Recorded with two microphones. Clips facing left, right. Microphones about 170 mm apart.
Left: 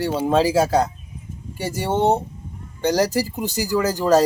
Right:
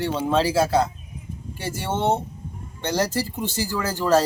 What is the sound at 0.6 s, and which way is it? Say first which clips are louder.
Speech: left 2 dB; 40° left (ahead or behind).